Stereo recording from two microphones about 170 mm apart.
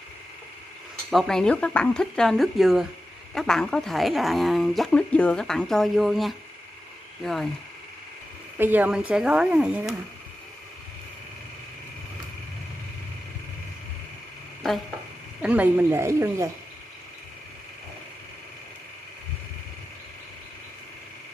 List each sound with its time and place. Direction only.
1.1 s speech: 5° left (ahead or behind)
8.5 s speech: 10° right (ahead or behind)
15.4 s speech: 10° right (ahead or behind)